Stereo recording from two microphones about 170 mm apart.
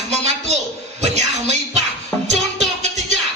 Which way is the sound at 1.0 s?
40° right (ahead or behind).